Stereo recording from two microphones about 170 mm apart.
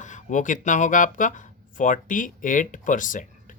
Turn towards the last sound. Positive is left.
turn(degrees=50)  # may be behind; listen again after turning